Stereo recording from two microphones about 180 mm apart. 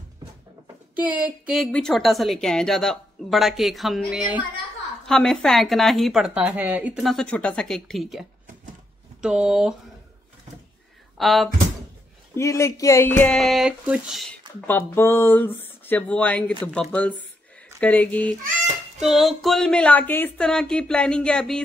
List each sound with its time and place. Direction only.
0.9 s a woman's voice: 10° right (ahead or behind)
11.1 s a woman's voice: centre (ahead or behind)
12.4 s speech: 15° left (ahead or behind); by 14.3 s centre (ahead or behind)
14.7 s a woman's voice: 10° left (ahead or behind)